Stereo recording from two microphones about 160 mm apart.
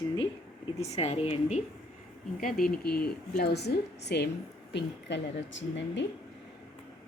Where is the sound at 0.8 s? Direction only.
40° left (ahead or behind).